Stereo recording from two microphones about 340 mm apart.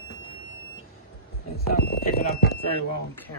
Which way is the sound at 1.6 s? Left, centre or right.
Left.